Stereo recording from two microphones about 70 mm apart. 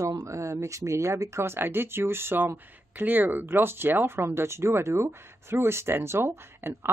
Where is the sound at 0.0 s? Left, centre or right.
Right.